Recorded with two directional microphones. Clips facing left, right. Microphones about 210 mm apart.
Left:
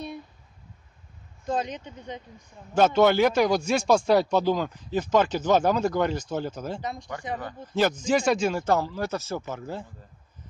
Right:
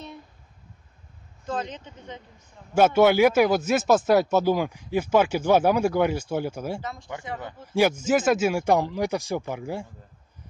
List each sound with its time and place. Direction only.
1.4 s speech: 15° left (ahead or behind)
2.7 s speech: 10° right (ahead or behind)
6.8 s speech: 15° left (ahead or behind)
7.7 s speech: 10° right (ahead or behind)